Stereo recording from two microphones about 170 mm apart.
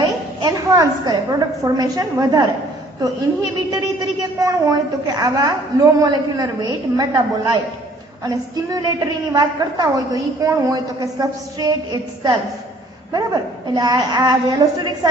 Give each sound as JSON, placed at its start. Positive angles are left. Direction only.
{"t": 0.0, "sound": "a woman's voice", "side_deg": -20}
{"t": 3.7, "sound": "a woman's voice", "side_deg": -20}